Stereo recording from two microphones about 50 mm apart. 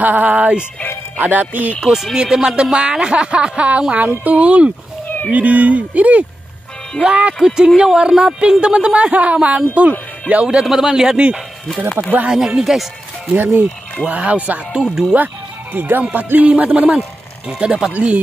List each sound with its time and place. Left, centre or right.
0.0 s music: right
1.2 s speech: right
2.1 s speech: centre
7.5 s speech: centre
10.6 s a man's voice: centre
12.3 s a man's voice: centre
13.3 s speech: right
14.7 s a man's voice: centre
15.7 s speech: right
17.5 s a man's voice: centre
17.9 s speech: right